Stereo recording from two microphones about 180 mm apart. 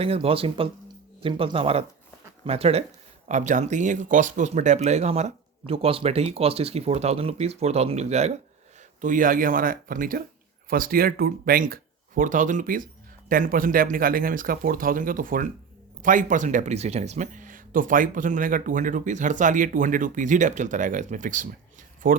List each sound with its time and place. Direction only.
0.0 s speech: 35° right (ahead or behind); by 22.2 s 50° right (ahead or behind)